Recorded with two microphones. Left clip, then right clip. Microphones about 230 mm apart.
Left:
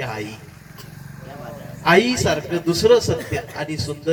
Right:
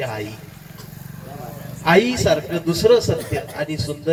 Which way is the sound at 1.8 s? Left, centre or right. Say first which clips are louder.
Even; left.